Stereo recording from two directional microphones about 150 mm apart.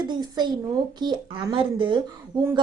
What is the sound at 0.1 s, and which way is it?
A woman's voice, 30° right (ahead or behind).